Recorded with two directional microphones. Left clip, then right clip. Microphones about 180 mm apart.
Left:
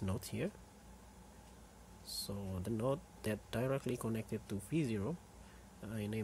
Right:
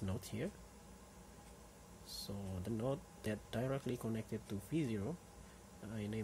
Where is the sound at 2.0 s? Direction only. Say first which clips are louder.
Left 4 dB; 20° left (ahead or behind).